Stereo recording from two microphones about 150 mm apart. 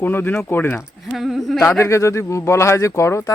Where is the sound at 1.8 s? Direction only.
20° left (ahead or behind).